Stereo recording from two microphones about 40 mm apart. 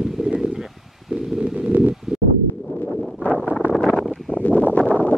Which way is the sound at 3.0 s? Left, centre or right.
Centre.